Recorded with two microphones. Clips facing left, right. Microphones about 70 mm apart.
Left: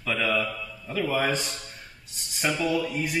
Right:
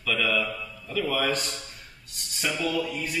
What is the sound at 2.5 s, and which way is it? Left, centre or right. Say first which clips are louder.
Speech: left 1 dB; centre.